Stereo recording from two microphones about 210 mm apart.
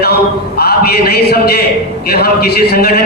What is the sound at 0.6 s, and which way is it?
A man's voice, 50° left (ahead or behind).